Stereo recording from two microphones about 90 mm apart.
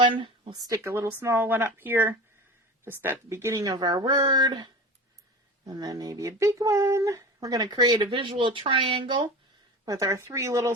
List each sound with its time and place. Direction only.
0.0 s speech: 70° right (ahead or behind)
0.7 s speech: 30° right (ahead or behind)
3.5 s speech: 40° right (ahead or behind)
7.4 s speech: 45° right (ahead or behind); by 9.3 s 70° right (ahead or behind)
9.8 s speech: 40° right (ahead or behind)